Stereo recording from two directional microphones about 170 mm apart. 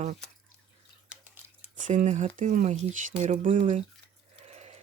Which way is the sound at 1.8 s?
50° right (ahead or behind).